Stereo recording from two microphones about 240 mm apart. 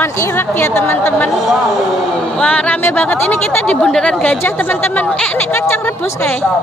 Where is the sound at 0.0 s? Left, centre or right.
Centre.